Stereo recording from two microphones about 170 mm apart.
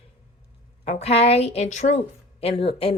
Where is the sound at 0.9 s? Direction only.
40° left (ahead or behind).